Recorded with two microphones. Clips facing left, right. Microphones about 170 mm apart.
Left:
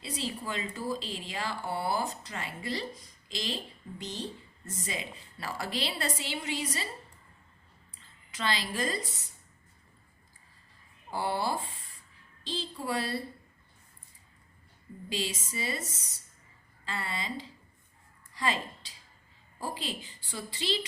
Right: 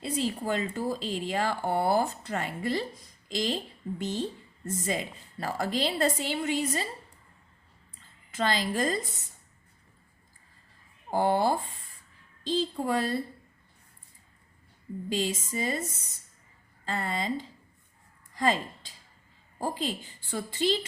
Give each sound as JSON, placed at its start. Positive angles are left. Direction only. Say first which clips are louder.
{"t": 0.0, "sound": "speech", "louder": "right 6 dB", "side_deg": -45}
{"t": 8.3, "sound": "speech", "louder": "right 5 dB", "side_deg": -45}
{"t": 11.1, "sound": "speech", "louder": "right 7 dB", "side_deg": -50}
{"t": 15.1, "sound": "speech", "louder": "right 5 dB", "side_deg": -45}
{"t": 16.8, "sound": "speech", "louder": "right 6 dB", "side_deg": -45}